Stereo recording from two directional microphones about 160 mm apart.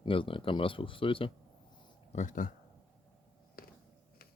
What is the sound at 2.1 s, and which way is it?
Speech, 55° left (ahead or behind).